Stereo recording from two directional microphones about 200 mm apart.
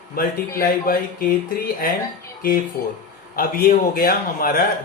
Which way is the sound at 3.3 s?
45° left (ahead or behind).